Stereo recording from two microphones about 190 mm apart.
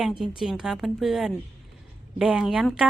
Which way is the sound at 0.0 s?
Centre (ahead or behind).